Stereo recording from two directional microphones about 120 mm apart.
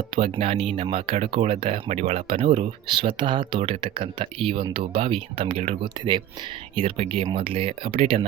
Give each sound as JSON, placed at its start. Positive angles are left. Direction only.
{"t": 0.2, "sound": "speech", "side_deg": -55}
{"t": 2.6, "sound": "speech", "side_deg": -50}
{"t": 6.7, "sound": "speech", "side_deg": -55}
{"t": 7.3, "sound": "speech", "side_deg": -50}